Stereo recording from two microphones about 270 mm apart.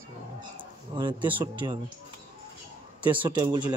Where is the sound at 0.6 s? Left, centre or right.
Centre.